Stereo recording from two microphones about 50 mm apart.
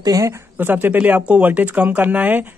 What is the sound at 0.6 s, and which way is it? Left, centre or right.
Speech, right.